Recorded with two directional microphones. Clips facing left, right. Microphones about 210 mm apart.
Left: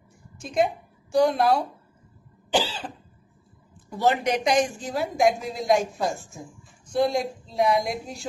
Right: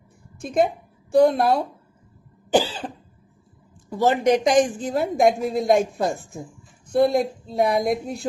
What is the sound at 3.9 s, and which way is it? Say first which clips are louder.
A woman's voice: right 5 dB; 50° right (ahead or behind).